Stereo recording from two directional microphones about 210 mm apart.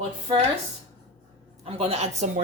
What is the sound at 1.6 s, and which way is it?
Speech, 30° right (ahead or behind).